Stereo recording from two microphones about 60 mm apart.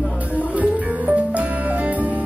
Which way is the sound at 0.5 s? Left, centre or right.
Right.